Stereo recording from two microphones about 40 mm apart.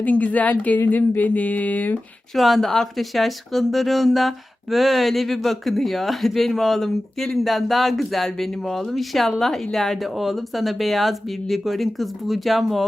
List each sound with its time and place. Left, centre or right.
0.0 s speech: left
2.3 s a woman's voice: centre